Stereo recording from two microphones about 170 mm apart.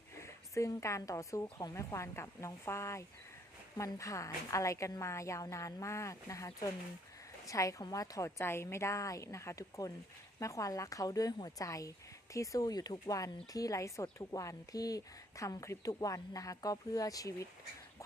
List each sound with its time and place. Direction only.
0.2 s a woman's voice: 20° left (ahead or behind)